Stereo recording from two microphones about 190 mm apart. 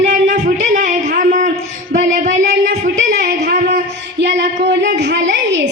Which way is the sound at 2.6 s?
50° right (ahead or behind).